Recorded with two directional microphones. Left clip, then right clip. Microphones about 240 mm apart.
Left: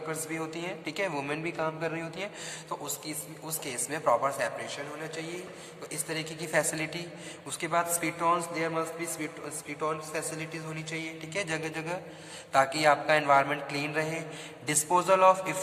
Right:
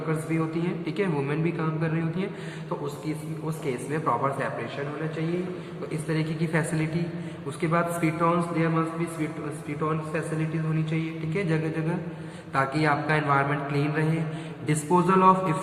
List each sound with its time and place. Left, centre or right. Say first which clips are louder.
0.3 s a man's voice: right 6 dB; left
3.7 s a man's voice: even; left
6.1 s a man's voice: right 4 dB; left
10.9 s a man's voice: right 1 dB; left